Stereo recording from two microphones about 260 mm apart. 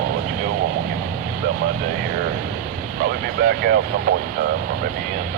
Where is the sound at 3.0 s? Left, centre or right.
Right.